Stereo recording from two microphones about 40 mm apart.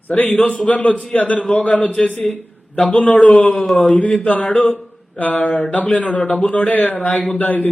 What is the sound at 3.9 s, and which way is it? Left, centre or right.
Speech, left.